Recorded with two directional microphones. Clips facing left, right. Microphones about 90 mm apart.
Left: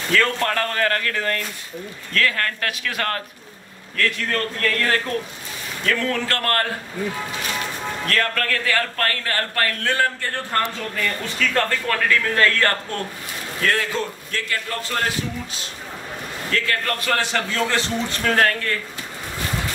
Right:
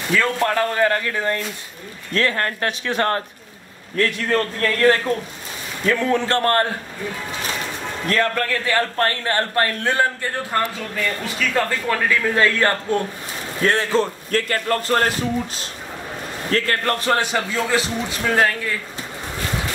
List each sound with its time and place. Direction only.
0.1 s a man's voice: 10° right (ahead or behind)
2.1 s a man's voice: 25° right (ahead or behind)
8.1 s a man's voice: 20° right (ahead or behind)
13.6 s a man's voice: 30° right (ahead or behind)
14.3 s a man's voice: 45° right (ahead or behind)
16.4 s a man's voice: 40° right (ahead or behind)
17.1 s a man's voice: 15° right (ahead or behind)